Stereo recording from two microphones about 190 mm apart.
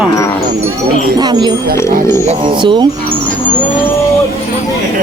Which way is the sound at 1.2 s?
20° right (ahead or behind).